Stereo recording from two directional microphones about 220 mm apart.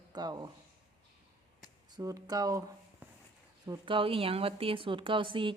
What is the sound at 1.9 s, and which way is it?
Speech, 15° right (ahead or behind).